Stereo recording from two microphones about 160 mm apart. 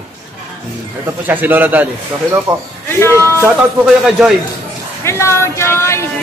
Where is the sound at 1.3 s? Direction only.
10° right (ahead or behind).